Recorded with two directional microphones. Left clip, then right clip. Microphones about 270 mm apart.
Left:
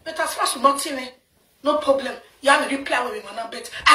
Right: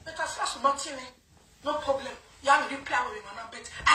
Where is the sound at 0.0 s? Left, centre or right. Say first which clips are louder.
Left 8 dB; left.